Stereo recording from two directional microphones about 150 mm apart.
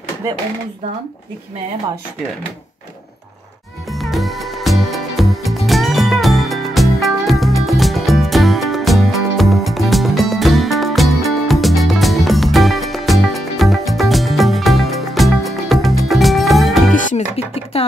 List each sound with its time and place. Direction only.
3.9 s music: centre (ahead or behind)
16.9 s music: 60° left (ahead or behind)
17.4 s a sound: 45° left (ahead or behind)